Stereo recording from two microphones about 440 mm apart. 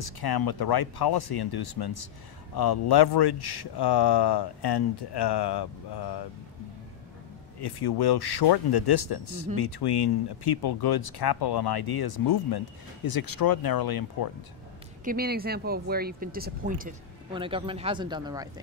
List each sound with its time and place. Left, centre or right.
0.0 s speech: left
7.6 s speech: left
15.0 s speech: right